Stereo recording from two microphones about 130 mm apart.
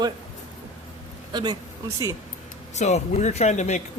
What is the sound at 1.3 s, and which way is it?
Speech, 35° right (ahead or behind).